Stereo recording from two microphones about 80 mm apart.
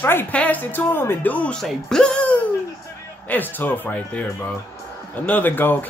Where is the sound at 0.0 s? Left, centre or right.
Left.